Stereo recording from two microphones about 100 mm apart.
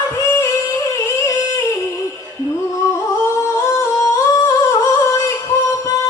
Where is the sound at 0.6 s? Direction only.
35° left (ahead or behind).